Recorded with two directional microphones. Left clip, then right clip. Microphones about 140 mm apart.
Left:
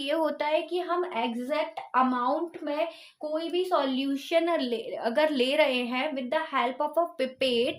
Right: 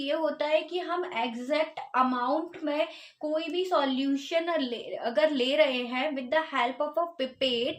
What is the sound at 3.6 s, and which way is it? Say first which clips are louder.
A woman's voice: left 1 dB; 35° left (ahead or behind).